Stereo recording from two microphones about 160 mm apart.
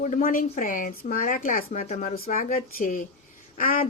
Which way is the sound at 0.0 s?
55° left (ahead or behind).